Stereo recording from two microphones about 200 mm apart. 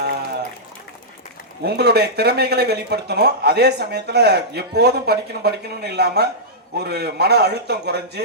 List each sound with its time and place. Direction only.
1.6 s speech: 55° right (ahead or behind)